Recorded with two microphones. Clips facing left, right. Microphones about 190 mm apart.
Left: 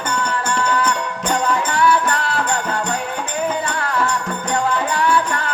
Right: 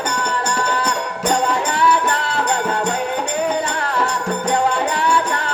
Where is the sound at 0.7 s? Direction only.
30° right (ahead or behind).